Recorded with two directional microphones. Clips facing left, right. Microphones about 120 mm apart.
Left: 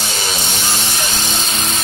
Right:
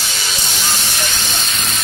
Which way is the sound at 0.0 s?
35° left (ahead or behind).